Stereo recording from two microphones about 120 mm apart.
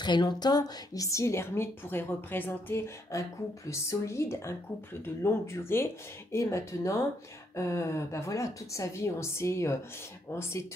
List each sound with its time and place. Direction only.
0.0 s a woman's voice: 40° left (ahead or behind)